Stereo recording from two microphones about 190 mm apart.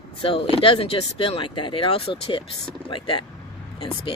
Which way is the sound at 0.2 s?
30° left (ahead or behind).